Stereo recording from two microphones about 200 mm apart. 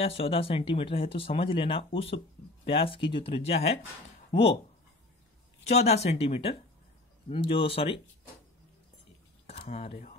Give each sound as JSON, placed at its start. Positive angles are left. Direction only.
{"t": 0.0, "sound": "speech", "side_deg": 30}
{"t": 5.6, "sound": "speech", "side_deg": 30}
{"t": 9.5, "sound": "speech", "side_deg": 30}